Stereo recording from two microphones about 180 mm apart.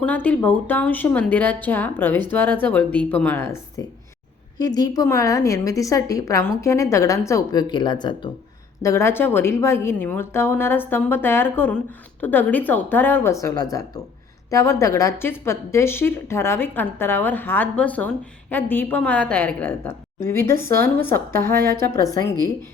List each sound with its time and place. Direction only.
0.0 s a woman's voice: 10° left (ahead or behind)
20.6 s speech: 55° right (ahead or behind)
20.8 s a woman's voice: 10° left (ahead or behind)